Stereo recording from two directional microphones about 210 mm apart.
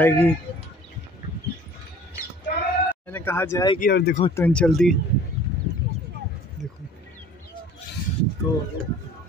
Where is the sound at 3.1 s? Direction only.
10° left (ahead or behind).